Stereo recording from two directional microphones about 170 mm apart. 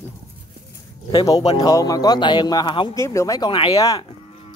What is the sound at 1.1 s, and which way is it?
Speech, 20° left (ahead or behind).